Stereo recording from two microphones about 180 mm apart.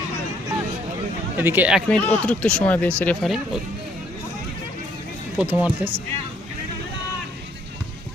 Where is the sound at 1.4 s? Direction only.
10° right (ahead or behind).